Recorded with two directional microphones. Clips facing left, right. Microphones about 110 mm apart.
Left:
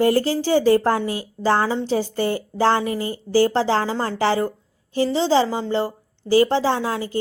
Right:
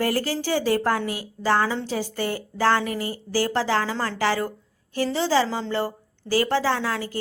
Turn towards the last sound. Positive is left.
turn(degrees=20)  # may be behind; listen again after turning